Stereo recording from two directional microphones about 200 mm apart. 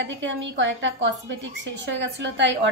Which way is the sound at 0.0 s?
65° right (ahead or behind).